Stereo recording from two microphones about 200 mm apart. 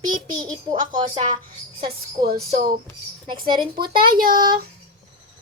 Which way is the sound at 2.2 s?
50° right (ahead or behind).